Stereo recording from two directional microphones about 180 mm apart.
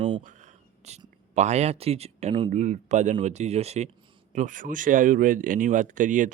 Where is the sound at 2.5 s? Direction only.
40° right (ahead or behind).